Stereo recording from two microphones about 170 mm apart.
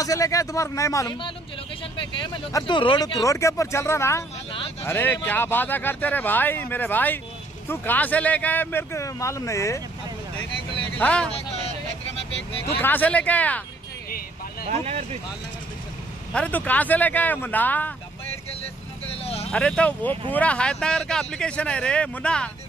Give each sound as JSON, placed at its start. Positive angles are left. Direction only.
{"t": 0.0, "sound": "speech", "side_deg": 20}
{"t": 2.2, "sound": "speech", "side_deg": 25}
{"t": 11.0, "sound": "speech", "side_deg": 5}
{"t": 12.7, "sound": "speech", "side_deg": 10}
{"t": 14.7, "sound": "speech", "side_deg": -40}
{"t": 16.3, "sound": "speech", "side_deg": 10}
{"t": 19.5, "sound": "speech", "side_deg": 5}